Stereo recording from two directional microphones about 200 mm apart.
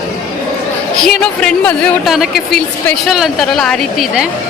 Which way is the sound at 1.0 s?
5° left (ahead or behind).